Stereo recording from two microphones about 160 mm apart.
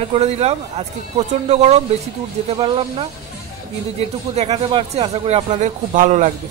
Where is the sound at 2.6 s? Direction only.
35° right (ahead or behind).